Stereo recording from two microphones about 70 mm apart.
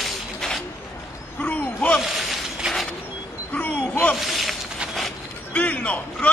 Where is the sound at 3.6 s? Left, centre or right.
Left.